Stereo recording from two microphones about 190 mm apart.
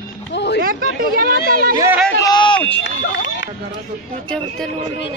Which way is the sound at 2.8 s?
70° left (ahead or behind).